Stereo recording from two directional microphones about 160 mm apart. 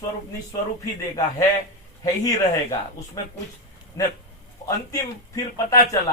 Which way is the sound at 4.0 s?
20° left (ahead or behind).